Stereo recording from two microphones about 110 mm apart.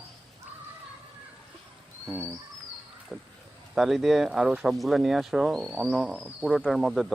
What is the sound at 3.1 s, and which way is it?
Speech, centre (ahead or behind).